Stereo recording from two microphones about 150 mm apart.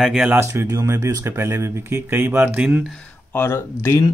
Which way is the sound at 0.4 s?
20° right (ahead or behind).